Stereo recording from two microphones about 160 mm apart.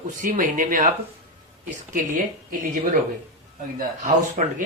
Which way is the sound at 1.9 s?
60° right (ahead or behind).